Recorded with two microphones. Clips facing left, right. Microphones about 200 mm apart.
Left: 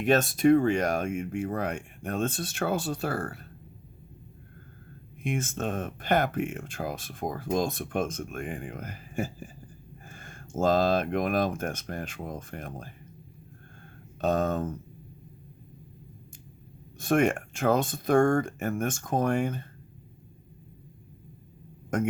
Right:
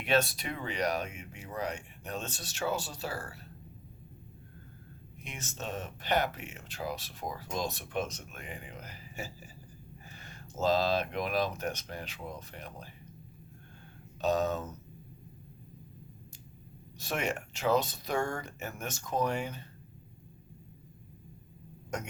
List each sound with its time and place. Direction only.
0.0 s speech: 45° left (ahead or behind)
5.2 s speech: 55° left (ahead or behind)
14.2 s speech: 50° left (ahead or behind)
17.0 s speech: 50° left (ahead or behind)
21.9 s speech: 55° left (ahead or behind)